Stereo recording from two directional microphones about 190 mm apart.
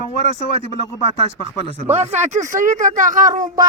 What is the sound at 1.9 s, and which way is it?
Speech, 35° right (ahead or behind).